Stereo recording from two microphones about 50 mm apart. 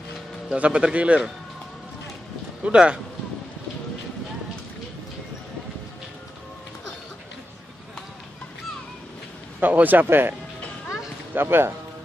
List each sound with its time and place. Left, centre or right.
0.6 s speech: right
2.6 s speech: centre
9.6 s speech: right
10.0 s speech: right
11.3 s speech: right